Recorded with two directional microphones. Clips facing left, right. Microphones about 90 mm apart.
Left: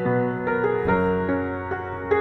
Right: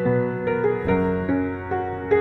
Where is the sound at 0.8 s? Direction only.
10° left (ahead or behind).